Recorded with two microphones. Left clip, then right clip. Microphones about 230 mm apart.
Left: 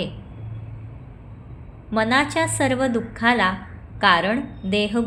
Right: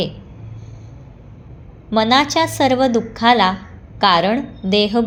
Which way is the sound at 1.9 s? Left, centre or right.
Centre.